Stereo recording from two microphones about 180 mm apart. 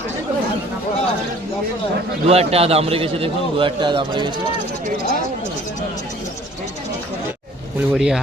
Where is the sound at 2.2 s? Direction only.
35° right (ahead or behind).